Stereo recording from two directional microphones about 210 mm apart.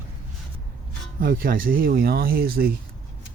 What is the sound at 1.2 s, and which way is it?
Speech, 45° right (ahead or behind).